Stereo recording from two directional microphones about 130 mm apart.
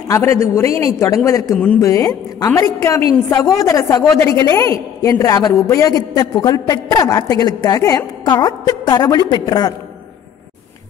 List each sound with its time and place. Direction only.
0.1 s a woman's voice: 20° left (ahead or behind)